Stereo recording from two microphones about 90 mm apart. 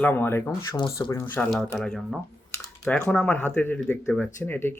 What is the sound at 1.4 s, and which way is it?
Speech, 10° left (ahead or behind).